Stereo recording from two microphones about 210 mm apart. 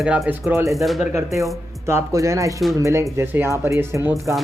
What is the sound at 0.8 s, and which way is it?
Speech, centre (ahead or behind).